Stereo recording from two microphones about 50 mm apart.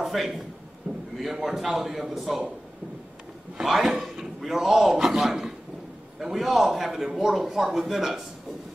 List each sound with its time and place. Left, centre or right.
0.0 s a man's voice: centre
0.8 s a sound: right
1.2 s speech: centre
3.5 s speech: centre